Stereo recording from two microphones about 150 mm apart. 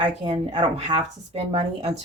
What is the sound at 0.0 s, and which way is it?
Speech, 35° right (ahead or behind).